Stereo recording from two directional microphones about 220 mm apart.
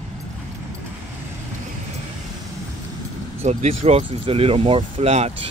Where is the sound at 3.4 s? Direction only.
30° right (ahead or behind).